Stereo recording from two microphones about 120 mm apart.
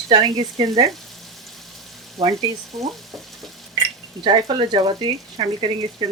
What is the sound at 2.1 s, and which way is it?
Speech, 30° right (ahead or behind).